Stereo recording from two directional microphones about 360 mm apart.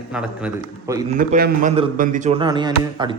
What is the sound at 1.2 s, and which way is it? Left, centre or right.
Speech, right.